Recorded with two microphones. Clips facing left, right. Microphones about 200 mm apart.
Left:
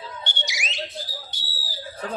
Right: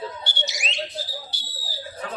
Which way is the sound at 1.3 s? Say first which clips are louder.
Even; 30° right (ahead or behind).